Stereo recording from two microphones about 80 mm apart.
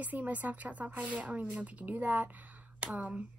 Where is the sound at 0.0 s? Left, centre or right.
Right.